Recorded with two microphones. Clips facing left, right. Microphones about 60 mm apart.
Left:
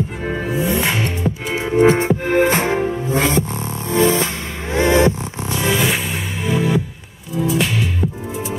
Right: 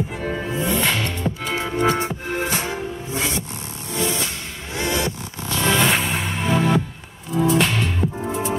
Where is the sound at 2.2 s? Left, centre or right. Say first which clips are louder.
Left 9 dB; left.